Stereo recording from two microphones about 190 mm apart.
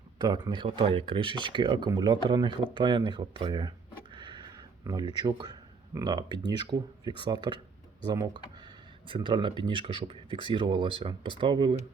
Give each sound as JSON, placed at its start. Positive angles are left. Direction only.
{"t": 0.2, "sound": "speech", "side_deg": -20}